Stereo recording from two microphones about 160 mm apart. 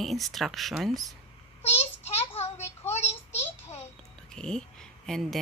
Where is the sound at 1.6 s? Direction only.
40° left (ahead or behind).